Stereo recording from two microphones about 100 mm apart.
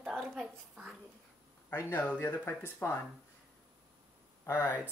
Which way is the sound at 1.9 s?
15° left (ahead or behind).